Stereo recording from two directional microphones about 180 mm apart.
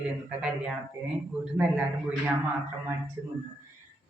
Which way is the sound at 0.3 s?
5° right (ahead or behind).